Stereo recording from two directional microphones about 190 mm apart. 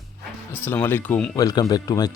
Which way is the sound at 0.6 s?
10° left (ahead or behind).